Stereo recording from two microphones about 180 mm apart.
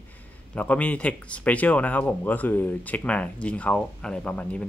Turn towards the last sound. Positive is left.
turn(degrees=5)  # may be behind; listen again after turning